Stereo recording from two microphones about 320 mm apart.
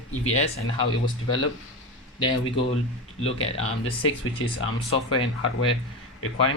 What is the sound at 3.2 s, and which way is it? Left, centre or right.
Speech, centre.